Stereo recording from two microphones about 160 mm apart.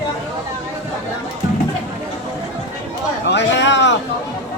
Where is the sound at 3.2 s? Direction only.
90° left.